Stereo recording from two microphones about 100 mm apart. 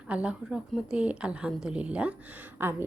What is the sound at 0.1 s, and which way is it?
A woman's voice, 10° right (ahead or behind).